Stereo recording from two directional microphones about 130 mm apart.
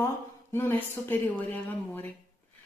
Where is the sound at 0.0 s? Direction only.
20° left (ahead or behind).